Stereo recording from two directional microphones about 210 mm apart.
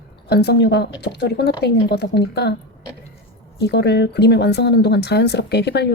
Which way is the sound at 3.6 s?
50° left (ahead or behind).